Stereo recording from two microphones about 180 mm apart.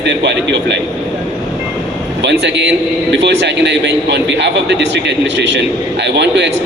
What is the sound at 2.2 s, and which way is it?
A man's voice, 75° right (ahead or behind).